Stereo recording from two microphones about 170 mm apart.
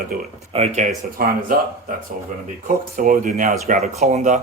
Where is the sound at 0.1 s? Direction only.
60° right (ahead or behind).